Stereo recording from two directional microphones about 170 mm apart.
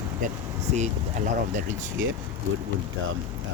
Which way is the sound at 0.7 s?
45° right (ahead or behind).